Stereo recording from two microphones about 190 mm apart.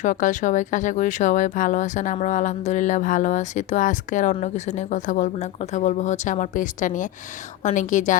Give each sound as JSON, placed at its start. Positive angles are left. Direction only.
{"t": 0.0, "sound": "a woman's voice", "side_deg": 40}